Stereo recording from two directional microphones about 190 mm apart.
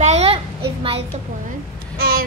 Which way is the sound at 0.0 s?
35° right (ahead or behind).